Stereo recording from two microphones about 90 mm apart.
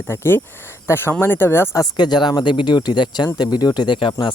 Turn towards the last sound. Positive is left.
turn(degrees=65)  # may be behind; listen again after turning